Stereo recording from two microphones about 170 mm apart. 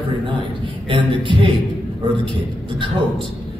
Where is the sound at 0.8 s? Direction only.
30° right (ahead or behind).